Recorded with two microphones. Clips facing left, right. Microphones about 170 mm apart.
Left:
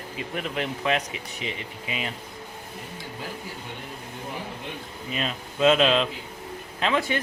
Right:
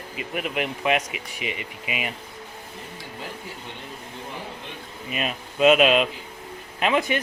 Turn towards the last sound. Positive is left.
turn(degrees=-15)  # may be behind; listen again after turning